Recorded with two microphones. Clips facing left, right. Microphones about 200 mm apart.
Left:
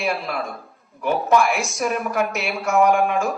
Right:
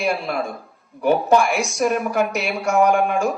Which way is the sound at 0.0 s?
Centre (ahead or behind).